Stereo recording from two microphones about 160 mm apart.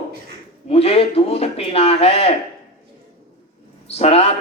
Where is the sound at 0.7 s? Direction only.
40° left (ahead or behind).